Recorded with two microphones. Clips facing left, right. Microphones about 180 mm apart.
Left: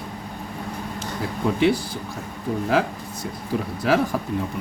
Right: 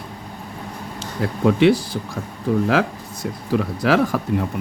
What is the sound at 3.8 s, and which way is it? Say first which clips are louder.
Speech: right 2 dB; 90° right.